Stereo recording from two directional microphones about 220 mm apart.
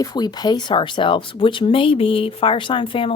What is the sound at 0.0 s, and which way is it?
Speech, 20° left (ahead or behind).